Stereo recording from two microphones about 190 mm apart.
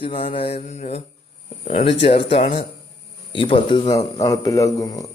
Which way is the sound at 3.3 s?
25° left (ahead or behind).